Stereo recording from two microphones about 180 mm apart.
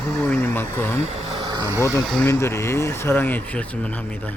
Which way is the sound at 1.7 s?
15° left (ahead or behind).